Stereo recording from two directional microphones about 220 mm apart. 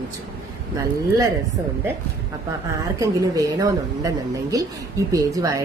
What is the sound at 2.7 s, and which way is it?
A woman's voice, 15° right (ahead or behind).